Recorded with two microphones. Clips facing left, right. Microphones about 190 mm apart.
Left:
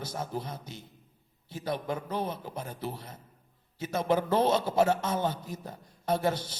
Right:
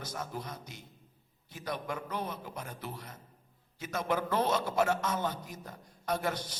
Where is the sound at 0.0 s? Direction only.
30° left (ahead or behind).